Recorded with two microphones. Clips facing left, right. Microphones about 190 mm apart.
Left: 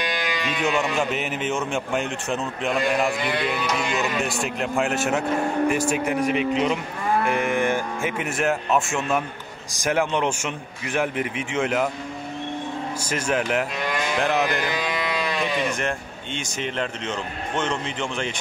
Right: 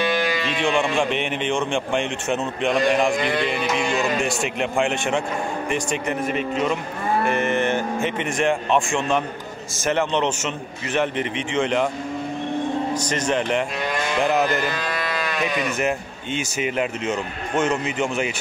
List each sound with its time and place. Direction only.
0.6 s a man's voice: 5° left (ahead or behind)
12.9 s a man's voice: 10° left (ahead or behind)
14.7 s speech: 15° left (ahead or behind)
16.3 s a man's voice: 10° right (ahead or behind)